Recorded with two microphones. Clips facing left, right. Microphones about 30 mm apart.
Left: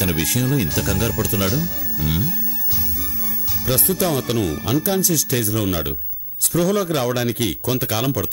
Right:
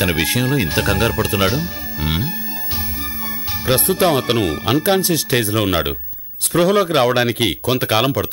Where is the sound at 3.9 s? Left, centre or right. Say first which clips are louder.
Right 5 dB; right.